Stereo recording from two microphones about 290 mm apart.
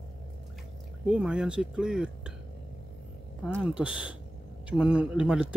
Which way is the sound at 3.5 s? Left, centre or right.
Centre.